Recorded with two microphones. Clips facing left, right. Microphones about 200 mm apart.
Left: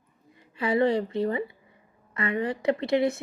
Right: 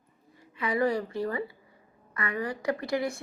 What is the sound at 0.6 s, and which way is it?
A woman's voice, 25° left (ahead or behind).